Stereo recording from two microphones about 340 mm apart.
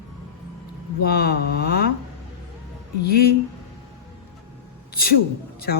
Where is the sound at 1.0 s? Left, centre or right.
Left.